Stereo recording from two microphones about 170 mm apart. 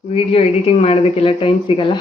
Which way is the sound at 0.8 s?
35° left (ahead or behind).